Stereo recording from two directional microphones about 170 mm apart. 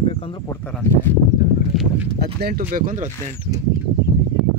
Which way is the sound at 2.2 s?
65° right (ahead or behind).